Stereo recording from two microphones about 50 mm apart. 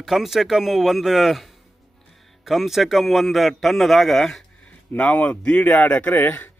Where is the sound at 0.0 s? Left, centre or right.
Centre.